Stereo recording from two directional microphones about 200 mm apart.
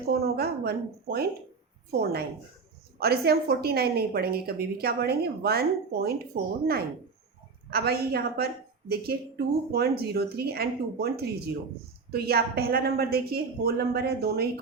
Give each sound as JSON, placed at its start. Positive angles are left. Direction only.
{"t": 0.1, "sound": "a woman's voice", "side_deg": -50}
{"t": 10.0, "sound": "a woman's voice", "side_deg": -50}